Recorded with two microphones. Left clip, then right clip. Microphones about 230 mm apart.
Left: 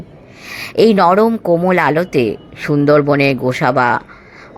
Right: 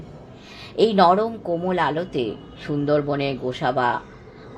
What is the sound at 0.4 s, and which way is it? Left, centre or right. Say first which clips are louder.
A woman's voice: left 8 dB; left.